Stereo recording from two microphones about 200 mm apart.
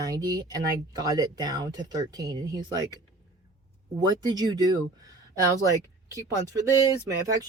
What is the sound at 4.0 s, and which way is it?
Speech, 20° right (ahead or behind).